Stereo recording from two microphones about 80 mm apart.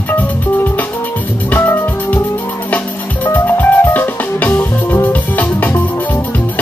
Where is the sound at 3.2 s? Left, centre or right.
Left.